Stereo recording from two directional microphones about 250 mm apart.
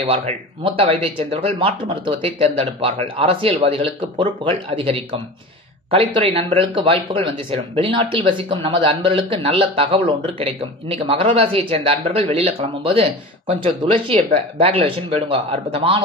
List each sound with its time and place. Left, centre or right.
0.0 s a man's voice: right